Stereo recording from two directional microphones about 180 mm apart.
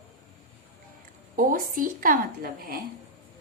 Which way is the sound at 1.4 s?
50° right (ahead or behind).